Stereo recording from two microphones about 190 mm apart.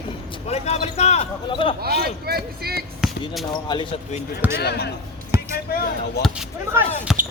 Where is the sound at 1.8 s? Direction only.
55° right (ahead or behind).